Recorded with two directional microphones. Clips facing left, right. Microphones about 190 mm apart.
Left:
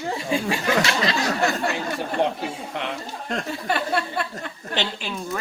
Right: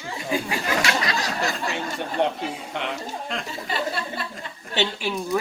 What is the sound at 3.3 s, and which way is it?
Speech, 50° left (ahead or behind).